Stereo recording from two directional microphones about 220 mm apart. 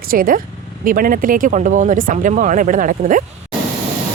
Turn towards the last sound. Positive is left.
turn(degrees=-35)  # may be behind; listen again after turning